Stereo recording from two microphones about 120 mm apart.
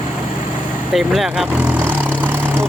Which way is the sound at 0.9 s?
Centre (ahead or behind).